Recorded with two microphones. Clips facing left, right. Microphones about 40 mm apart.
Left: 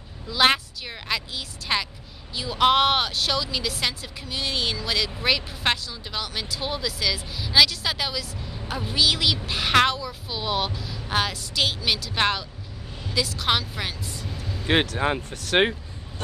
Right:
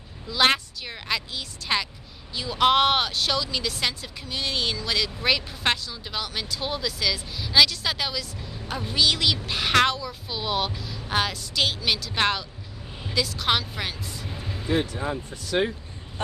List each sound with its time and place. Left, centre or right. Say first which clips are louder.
0.3 s speech: left 1 dB; centre
14.3 s music: even; centre
14.7 s speech: left 4 dB; left